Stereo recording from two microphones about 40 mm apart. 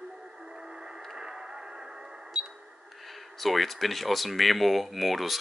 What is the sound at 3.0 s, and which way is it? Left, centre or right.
Speech, centre.